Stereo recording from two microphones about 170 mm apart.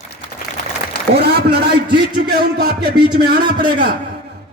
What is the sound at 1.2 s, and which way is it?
A man's voice, 65° right (ahead or behind).